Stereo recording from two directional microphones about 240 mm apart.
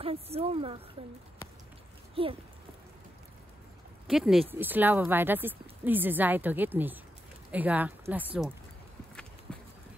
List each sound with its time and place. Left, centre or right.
0.0 s speech: right
2.2 s speech: right
4.1 s speech: centre
9.5 s bird: centre